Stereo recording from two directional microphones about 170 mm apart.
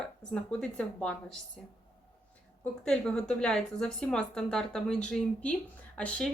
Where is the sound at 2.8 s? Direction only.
5° left (ahead or behind).